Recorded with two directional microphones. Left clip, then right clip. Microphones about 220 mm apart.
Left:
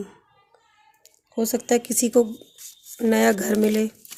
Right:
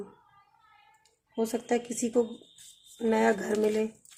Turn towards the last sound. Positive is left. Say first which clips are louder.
# left 5 dB
turn(degrees=50)  # may be behind; listen again after turning